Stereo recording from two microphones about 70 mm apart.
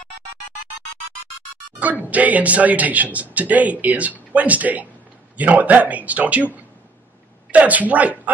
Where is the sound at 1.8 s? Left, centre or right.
Right.